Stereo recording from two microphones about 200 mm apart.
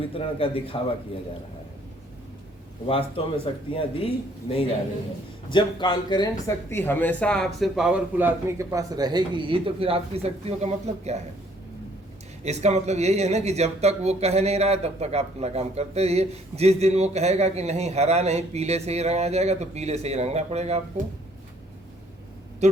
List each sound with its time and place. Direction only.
0.0 s a man's voice: 25° left (ahead or behind)
2.8 s a man's voice: 30° left (ahead or behind); by 11.2 s 35° right (ahead or behind)
12.4 s speech: 35° right (ahead or behind)